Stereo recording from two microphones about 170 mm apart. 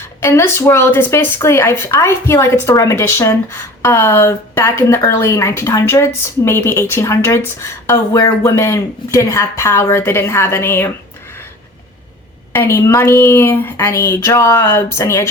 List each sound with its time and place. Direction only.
0.2 s a woman's voice: 15° left (ahead or behind)
12.5 s a woman's voice: 15° left (ahead or behind)